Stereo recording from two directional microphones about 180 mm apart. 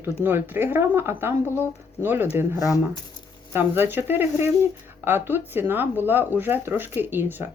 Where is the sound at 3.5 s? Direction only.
10° right (ahead or behind).